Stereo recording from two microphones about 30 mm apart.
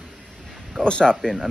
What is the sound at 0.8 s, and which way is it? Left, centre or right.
Speech, left.